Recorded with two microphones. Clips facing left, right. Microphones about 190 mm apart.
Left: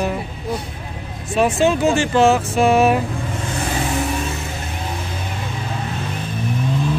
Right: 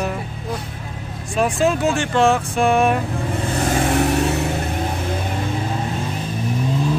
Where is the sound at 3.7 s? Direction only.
55° right (ahead or behind).